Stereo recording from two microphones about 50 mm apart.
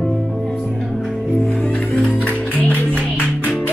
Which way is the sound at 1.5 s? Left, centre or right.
Left.